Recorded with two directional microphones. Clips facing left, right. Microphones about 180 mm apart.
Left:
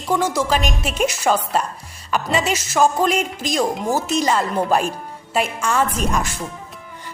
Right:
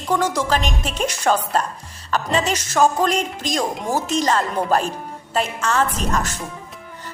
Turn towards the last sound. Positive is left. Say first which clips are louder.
# left 1 dB
turn(degrees=10)  # may be behind; listen again after turning